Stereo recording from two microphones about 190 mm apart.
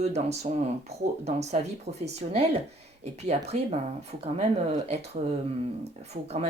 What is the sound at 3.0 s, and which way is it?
Speech, 35° right (ahead or behind).